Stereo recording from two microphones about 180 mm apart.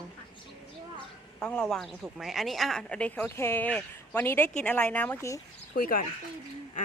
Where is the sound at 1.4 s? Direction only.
5° left (ahead or behind).